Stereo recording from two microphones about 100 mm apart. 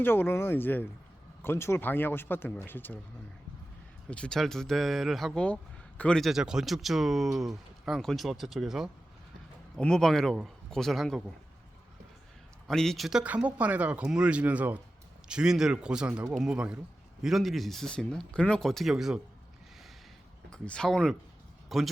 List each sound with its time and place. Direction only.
0.0 s a man's voice: 20° left (ahead or behind)
4.1 s a man's voice: 10° left (ahead or behind)
6.2 s speech: 5° right (ahead or behind)
9.7 s speech: 5° left (ahead or behind)
12.6 s speech: 5° left (ahead or behind)
13.2 s speech: 15° right (ahead or behind)
17.2 s speech: centre (ahead or behind)
20.5 s speech: 10° left (ahead or behind)